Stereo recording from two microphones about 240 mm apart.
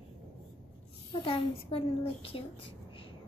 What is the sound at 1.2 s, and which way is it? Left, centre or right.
A woman's voice, left.